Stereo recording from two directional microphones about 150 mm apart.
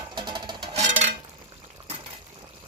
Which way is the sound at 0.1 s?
30° right (ahead or behind).